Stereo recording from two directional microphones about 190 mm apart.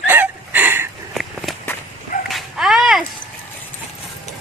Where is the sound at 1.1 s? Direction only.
Centre (ahead or behind).